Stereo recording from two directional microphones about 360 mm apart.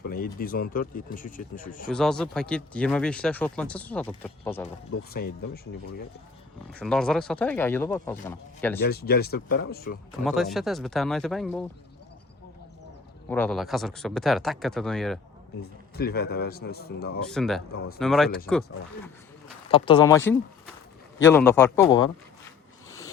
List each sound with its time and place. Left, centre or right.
0.0 s speech: left
1.9 s speech: centre
6.7 s speech: centre
8.8 s speech: left
10.2 s speech: centre
13.2 s speech: centre
16.0 s speech: left
17.2 s speech: centre
17.7 s speech: left
18.0 s speech: centre
19.7 s a man's voice: centre